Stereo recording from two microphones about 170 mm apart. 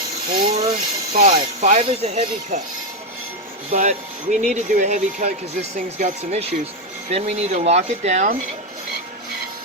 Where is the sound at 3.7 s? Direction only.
45° right (ahead or behind).